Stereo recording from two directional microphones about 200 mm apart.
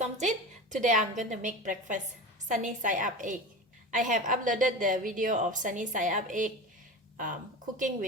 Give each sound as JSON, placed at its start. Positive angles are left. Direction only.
{"t": 0.0, "sound": "a woman's voice", "side_deg": -35}